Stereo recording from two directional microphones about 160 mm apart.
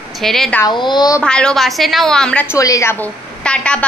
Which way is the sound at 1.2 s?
5° left (ahead or behind).